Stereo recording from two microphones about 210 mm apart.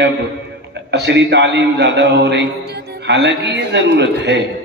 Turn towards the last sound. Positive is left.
turn(degrees=-55)  # may be behind; listen again after turning